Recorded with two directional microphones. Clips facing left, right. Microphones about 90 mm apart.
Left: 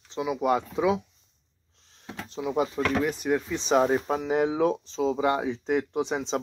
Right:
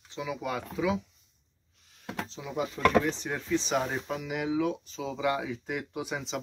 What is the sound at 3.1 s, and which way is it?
Speech, 10° left (ahead or behind).